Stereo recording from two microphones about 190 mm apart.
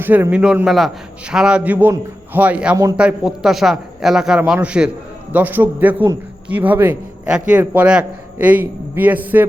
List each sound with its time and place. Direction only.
0.0 s a man's voice: 10° right (ahead or behind)